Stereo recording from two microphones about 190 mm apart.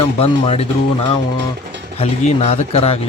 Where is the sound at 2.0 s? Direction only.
35° left (ahead or behind).